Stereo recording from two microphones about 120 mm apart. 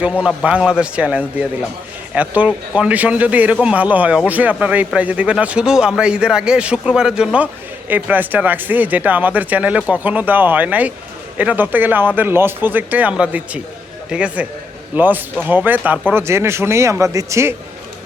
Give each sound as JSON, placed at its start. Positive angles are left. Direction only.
{"t": 0.0, "sound": "speech", "side_deg": -10}